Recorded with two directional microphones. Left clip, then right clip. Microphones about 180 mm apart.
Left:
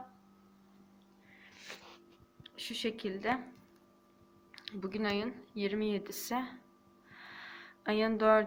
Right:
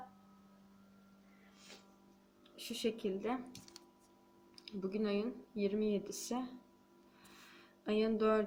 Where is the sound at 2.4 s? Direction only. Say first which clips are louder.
Left 2 dB; 15° right (ahead or behind).